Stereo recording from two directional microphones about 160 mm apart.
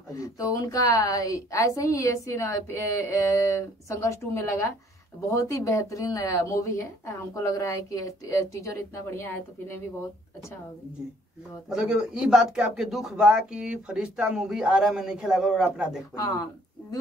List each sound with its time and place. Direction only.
0.2 s speech: 20° left (ahead or behind)
11.7 s speech: 5° right (ahead or behind)